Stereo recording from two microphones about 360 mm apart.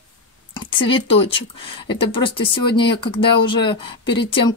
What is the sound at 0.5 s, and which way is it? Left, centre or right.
Speech, centre.